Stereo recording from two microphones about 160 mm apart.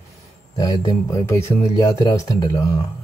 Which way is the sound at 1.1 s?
20° left (ahead or behind).